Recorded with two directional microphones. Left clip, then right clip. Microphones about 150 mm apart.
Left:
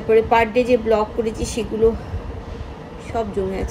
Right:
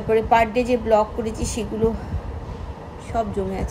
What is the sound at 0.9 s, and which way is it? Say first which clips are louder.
Speech: right 1 dB; 90° right.